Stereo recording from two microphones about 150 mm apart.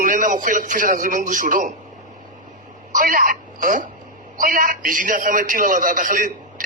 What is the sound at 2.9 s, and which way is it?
A man's voice, 65° right (ahead or behind).